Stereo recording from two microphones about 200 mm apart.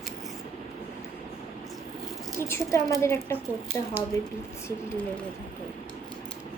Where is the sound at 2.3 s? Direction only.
10° left (ahead or behind).